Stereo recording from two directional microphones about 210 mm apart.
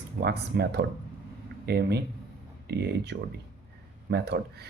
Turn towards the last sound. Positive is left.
turn(degrees=-50)  # may be behind; listen again after turning